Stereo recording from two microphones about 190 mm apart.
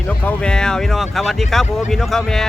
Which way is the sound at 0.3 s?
5° left (ahead or behind).